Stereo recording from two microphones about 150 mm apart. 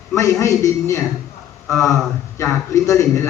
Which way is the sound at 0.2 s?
20° left (ahead or behind).